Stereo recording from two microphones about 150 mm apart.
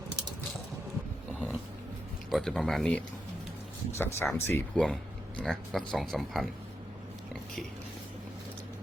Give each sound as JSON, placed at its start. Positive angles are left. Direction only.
{"t": 1.3, "sound": "a sound", "side_deg": 0}
{"t": 2.3, "sound": "speech", "side_deg": 5}
{"t": 4.7, "sound": "speech", "side_deg": 5}